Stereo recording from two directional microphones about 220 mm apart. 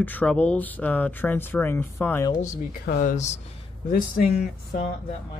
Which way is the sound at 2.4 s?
40° left (ahead or behind).